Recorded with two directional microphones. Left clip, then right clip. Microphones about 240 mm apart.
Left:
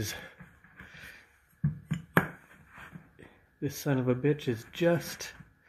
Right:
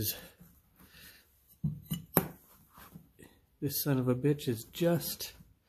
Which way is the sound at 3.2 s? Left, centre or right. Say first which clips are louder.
Left 2 dB; centre.